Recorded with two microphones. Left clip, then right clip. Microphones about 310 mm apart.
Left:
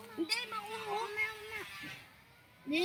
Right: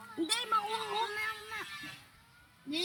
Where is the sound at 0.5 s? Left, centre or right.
Right.